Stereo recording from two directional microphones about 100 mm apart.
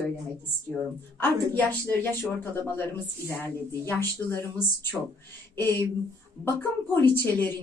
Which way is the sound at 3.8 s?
25° left (ahead or behind).